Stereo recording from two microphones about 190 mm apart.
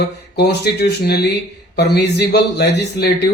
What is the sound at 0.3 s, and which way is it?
Speech, 60° left (ahead or behind).